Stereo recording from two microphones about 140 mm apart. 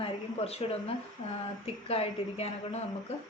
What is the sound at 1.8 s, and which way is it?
Speech, 45° left (ahead or behind).